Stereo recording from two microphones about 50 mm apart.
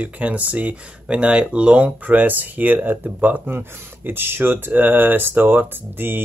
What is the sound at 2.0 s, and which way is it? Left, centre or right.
Speech, right.